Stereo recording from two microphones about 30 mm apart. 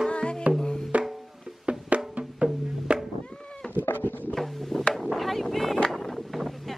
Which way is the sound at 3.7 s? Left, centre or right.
Left.